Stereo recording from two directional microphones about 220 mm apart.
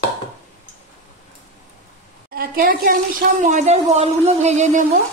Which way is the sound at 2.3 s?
40° right (ahead or behind).